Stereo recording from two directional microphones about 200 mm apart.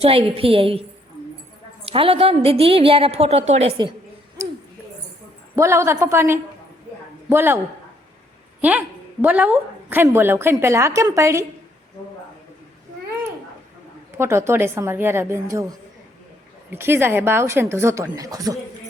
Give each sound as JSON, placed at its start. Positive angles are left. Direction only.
{"t": 0.0, "sound": "a woman's voice", "side_deg": -30}
{"t": 5.5, "sound": "a woman's voice", "side_deg": -15}
{"t": 9.2, "sound": "a woman's voice", "side_deg": -10}
{"t": 14.2, "sound": "a woman's voice", "side_deg": -15}
{"t": 16.7, "sound": "a woman's voice", "side_deg": -10}